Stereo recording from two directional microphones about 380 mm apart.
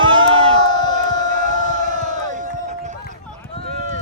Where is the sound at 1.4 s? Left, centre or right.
Centre.